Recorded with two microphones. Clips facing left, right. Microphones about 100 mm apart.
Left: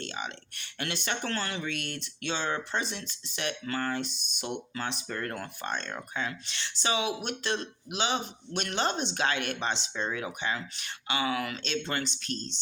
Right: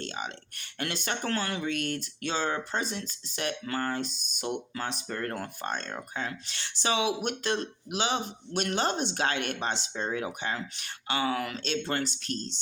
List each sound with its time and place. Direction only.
0.0 s speech: 40° right (ahead or behind)